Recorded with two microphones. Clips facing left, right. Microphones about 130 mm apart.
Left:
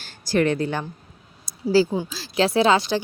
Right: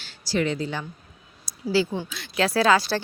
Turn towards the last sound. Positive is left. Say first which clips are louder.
# left 2 dB
turn(degrees=20)  # may be behind; listen again after turning